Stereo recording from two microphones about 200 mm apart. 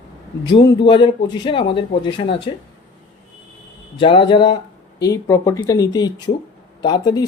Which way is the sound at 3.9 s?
25° left (ahead or behind).